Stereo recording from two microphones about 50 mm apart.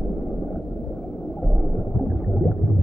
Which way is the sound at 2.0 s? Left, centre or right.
Centre.